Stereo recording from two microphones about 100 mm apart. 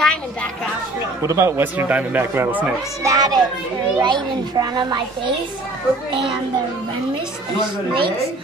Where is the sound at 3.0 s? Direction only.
40° right (ahead or behind).